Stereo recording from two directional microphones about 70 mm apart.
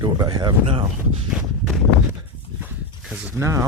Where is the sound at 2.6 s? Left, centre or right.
Right.